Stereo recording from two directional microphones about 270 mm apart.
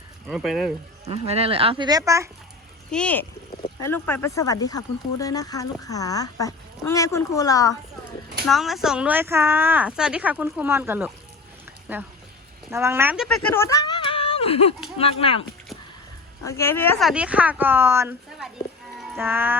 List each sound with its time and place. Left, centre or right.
0.3 s speech: centre
1.0 s speech: right
2.9 s speech: centre
8.4 s speech: centre
13.2 s speech: centre
16.5 s speech: centre
18.9 s a sound: centre